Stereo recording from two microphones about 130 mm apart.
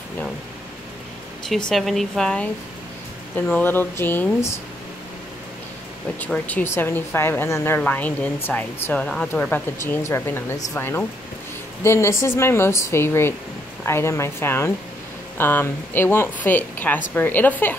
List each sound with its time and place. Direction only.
1.7 s a woman's voice: centre (ahead or behind); by 4.6 s 15° left (ahead or behind)
6.1 s a woman's voice: 10° left (ahead or behind)